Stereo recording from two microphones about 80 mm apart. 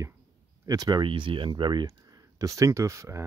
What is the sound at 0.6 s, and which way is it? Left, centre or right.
Speech, right.